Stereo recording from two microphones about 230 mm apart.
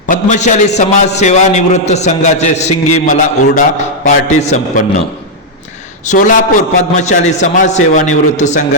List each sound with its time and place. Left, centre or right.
0.1 s a man's voice: left
6.1 s a man's voice: left